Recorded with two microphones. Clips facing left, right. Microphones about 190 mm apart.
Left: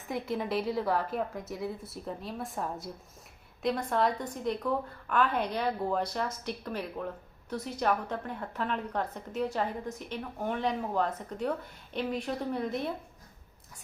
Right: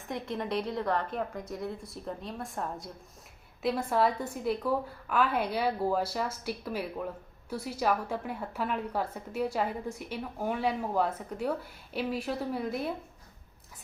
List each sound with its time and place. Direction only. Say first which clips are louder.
0.1 s a woman's voice: left 1 dB; 5° left (ahead or behind)